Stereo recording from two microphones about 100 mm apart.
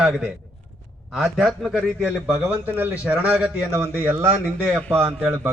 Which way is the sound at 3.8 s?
25° right (ahead or behind).